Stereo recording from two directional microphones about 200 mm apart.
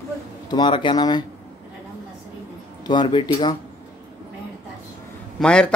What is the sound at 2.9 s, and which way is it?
Speech, 25° left (ahead or behind).